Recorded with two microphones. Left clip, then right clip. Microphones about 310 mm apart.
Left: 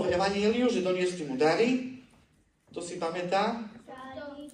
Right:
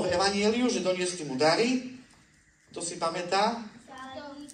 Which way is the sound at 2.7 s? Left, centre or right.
Right.